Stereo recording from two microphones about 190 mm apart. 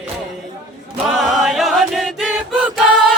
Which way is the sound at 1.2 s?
Centre (ahead or behind).